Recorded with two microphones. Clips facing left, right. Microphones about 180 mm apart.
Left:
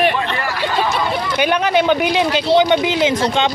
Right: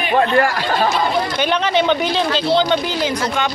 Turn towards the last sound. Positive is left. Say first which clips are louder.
# left 4 dB
turn(degrees=20)  # may be behind; listen again after turning